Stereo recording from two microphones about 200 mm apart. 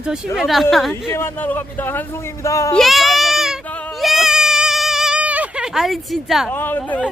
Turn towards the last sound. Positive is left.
turn(degrees=5)  # may be behind; listen again after turning